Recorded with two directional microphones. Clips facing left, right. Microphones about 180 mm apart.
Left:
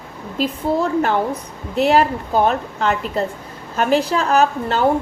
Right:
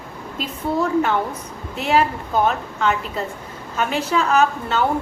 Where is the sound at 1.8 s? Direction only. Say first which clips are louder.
Left 3 dB; 35° left (ahead or behind).